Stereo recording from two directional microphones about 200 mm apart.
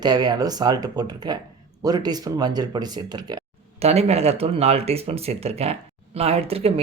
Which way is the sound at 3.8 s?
30° right (ahead or behind).